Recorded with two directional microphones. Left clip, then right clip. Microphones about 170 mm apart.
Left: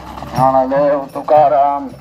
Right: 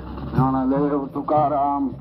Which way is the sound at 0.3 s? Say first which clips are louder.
Left 10 dB; 35° left (ahead or behind).